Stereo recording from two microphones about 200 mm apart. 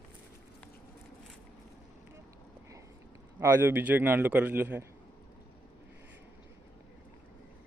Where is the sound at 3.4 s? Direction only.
10° right (ahead or behind).